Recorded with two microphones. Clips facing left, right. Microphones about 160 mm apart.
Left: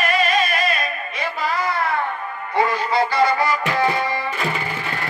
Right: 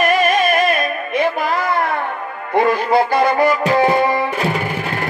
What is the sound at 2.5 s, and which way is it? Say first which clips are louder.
Music: right 5 dB; 55° right (ahead or behind).